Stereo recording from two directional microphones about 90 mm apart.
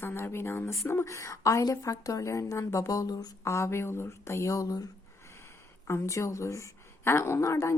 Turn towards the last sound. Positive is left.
turn(degrees=30)  # may be behind; listen again after turning